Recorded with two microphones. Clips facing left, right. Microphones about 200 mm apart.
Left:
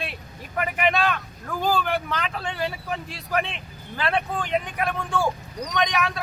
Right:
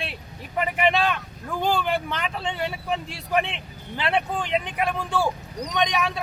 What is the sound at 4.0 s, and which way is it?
Speech, 25° right (ahead or behind).